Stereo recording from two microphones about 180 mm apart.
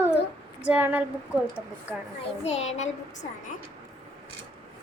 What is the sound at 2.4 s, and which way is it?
Child singing, 35° left (ahead or behind).